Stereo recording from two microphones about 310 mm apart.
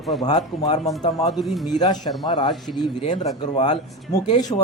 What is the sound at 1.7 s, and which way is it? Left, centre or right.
Speech, centre.